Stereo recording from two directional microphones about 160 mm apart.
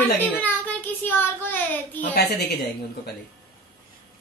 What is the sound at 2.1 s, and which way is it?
Speech, 80° left.